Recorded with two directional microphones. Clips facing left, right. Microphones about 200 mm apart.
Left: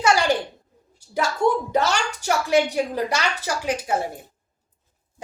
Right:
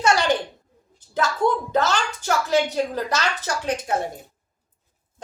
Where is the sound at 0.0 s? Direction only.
10° left (ahead or behind).